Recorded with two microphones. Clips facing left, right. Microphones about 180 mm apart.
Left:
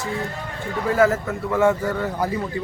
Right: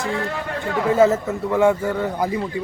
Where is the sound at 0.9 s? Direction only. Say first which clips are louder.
Right 2 dB; 20° right (ahead or behind).